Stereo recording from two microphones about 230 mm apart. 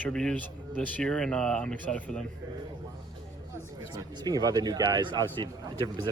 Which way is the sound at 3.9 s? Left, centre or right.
Centre.